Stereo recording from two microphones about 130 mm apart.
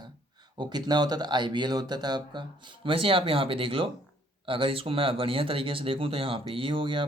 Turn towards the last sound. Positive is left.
turn(degrees=-40)  # may be behind; listen again after turning